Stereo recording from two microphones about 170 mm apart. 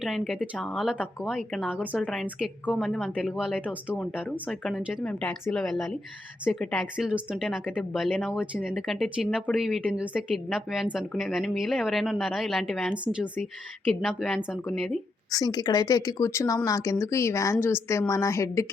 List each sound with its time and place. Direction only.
0.0 s speech: 5° right (ahead or behind)
14.5 s speech: centre (ahead or behind)
15.3 s a woman's voice: 20° left (ahead or behind)